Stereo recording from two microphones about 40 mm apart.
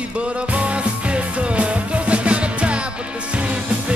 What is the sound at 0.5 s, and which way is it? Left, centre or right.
Music, right.